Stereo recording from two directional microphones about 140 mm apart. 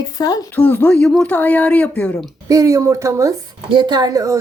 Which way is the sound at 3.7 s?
35° right (ahead or behind).